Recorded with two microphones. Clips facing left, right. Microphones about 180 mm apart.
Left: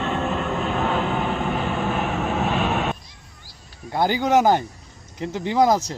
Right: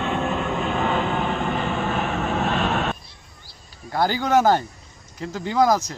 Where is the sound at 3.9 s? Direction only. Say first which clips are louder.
Left 1 dB; 20° left (ahead or behind).